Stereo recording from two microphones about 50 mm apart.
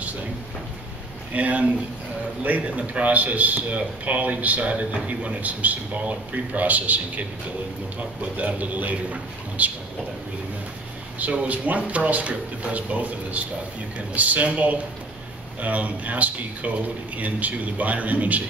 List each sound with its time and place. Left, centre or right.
1.3 s a man's voice: right
8.4 s a man's voice: right
11.1 s a man's voice: right